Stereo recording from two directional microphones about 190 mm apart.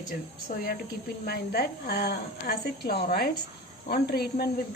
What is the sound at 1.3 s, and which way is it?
A woman's voice, 55° left (ahead or behind).